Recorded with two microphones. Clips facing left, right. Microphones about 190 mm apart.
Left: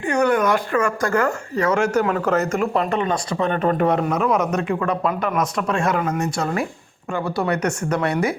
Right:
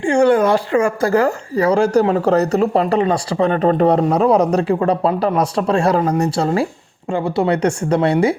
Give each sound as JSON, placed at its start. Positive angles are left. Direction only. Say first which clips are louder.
{"t": 0.0, "sound": "speech", "louder": "right 5 dB", "side_deg": -30}